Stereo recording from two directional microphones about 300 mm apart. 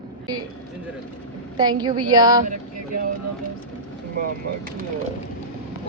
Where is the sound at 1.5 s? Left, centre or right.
Centre.